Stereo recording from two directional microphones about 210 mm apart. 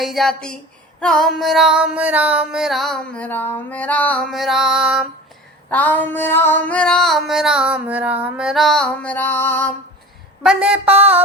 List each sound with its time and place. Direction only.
0.0 s female singing: centre (ahead or behind)
5.7 s female singing: 10° left (ahead or behind)
10.4 s female singing: 5° right (ahead or behind)